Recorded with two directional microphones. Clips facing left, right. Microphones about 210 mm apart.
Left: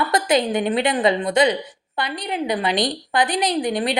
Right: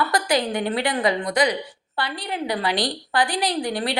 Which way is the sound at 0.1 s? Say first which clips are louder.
Left 3 dB; 20° left (ahead or behind).